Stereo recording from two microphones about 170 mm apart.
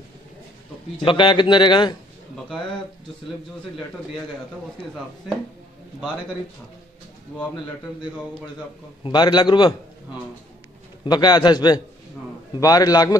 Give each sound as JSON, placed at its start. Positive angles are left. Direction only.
{"t": 0.9, "sound": "a man's voice", "side_deg": 30}
{"t": 9.0, "sound": "a man's voice", "side_deg": 25}
{"t": 11.1, "sound": "a man's voice", "side_deg": 25}